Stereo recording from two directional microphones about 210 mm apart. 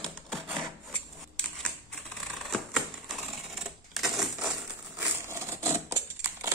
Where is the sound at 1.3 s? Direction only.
5° left (ahead or behind).